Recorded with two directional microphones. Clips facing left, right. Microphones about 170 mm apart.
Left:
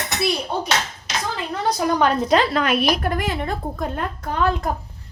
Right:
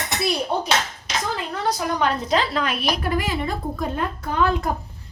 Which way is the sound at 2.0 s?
55° left (ahead or behind).